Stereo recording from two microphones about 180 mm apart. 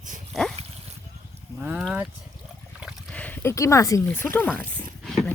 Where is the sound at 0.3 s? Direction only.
Centre (ahead or behind).